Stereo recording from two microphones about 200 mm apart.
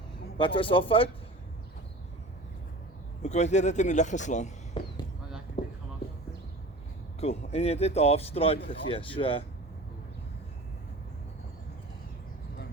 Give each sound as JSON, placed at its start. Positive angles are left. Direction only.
{"t": 0.3, "sound": "speech", "side_deg": 25}
{"t": 3.2, "sound": "speech", "side_deg": 35}
{"t": 5.6, "sound": "a sound", "side_deg": 25}
{"t": 7.2, "sound": "speech", "side_deg": 30}